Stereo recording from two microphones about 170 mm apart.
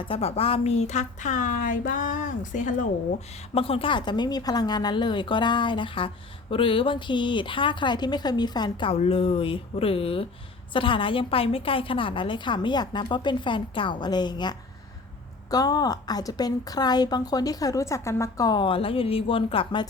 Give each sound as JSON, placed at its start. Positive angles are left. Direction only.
{"t": 0.0, "sound": "a woman's voice", "side_deg": 35}
{"t": 3.5, "sound": "a woman's voice", "side_deg": 35}